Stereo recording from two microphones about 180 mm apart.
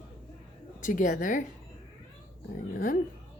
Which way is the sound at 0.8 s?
45° left (ahead or behind).